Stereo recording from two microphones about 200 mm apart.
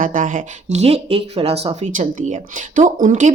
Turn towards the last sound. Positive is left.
turn(degrees=-40)  # may be behind; listen again after turning